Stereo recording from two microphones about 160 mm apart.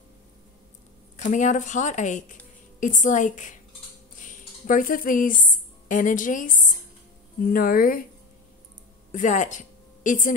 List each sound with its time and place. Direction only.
1.1 s speech: 50° left (ahead or behind)
4.2 s a sound: 55° left (ahead or behind)
7.4 s speech: 65° left (ahead or behind)
9.1 s speech: 50° left (ahead or behind)